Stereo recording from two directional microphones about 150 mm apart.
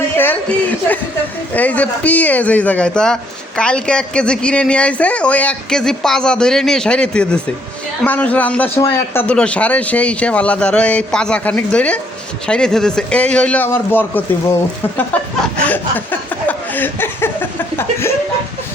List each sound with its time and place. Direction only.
0.2 s speech: 10° left (ahead or behind)
8.8 s speech: 25° left (ahead or behind)
9.2 s speech: 5° left (ahead or behind)
15.6 s speech: 10° left (ahead or behind)
16.5 s chuckle: 15° left (ahead or behind)